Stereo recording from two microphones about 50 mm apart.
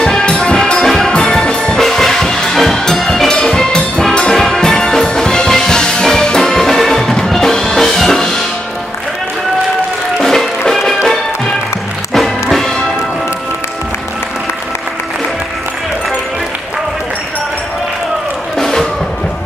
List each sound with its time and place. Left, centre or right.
0.0 s music: centre
10.2 s music: centre
12.1 s music: centre
18.6 s music: centre